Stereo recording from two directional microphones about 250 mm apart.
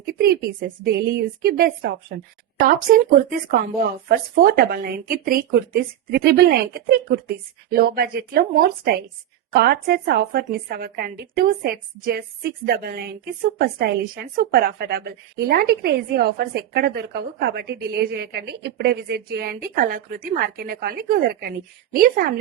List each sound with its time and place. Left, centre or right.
0.0 s a woman's voice: right